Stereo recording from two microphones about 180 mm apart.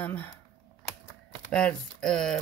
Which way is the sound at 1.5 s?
5° left (ahead or behind).